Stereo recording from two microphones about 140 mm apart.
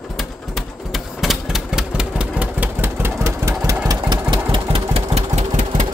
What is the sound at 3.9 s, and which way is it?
Engine, 30° right (ahead or behind).